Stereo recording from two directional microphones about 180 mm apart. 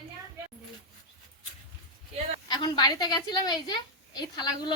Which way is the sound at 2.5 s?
25° left (ahead or behind).